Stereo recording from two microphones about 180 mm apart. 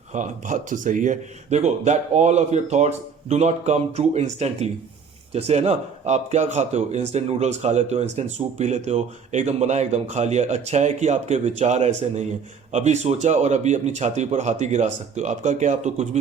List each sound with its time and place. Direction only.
0.1 s a man's voice: 45° right (ahead or behind)